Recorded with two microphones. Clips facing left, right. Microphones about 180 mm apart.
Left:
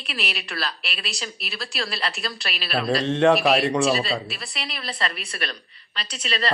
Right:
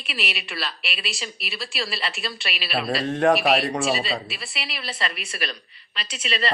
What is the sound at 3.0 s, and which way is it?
Speech, 25° left (ahead or behind).